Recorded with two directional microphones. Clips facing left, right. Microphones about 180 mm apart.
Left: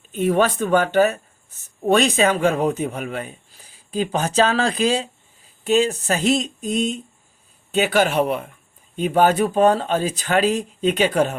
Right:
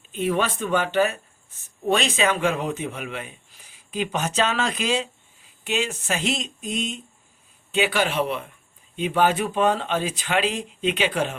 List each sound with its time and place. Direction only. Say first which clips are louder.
0.1 s speech: left 5 dB; 45° left (ahead or behind)
1.8 s speech: left 4 dB; 55° left (ahead or behind)
2.1 s a man's voice: left 4 dB; 40° left (ahead or behind)